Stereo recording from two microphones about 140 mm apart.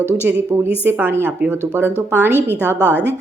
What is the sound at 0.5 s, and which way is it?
A woman's voice, 15° right (ahead or behind).